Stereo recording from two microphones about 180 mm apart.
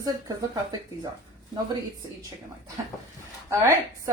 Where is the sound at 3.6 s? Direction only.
15° right (ahead or behind).